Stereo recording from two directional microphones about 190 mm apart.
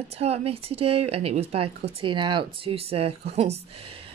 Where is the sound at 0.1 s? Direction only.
35° right (ahead or behind).